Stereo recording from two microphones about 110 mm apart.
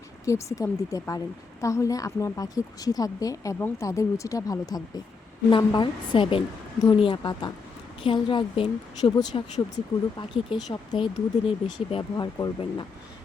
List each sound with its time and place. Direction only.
0.3 s a woman's voice: 30° left (ahead or behind)
5.5 s speech: 45° left (ahead or behind)
12.1 s speech: 35° left (ahead or behind)